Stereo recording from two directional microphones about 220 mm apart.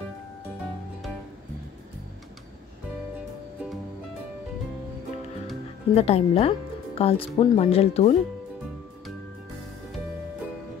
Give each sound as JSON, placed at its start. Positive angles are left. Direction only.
{"t": 5.9, "sound": "speech", "side_deg": 25}